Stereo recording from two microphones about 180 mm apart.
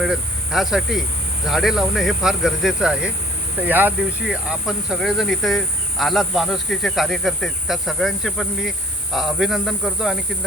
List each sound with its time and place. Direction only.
0.0 s speech: centre (ahead or behind)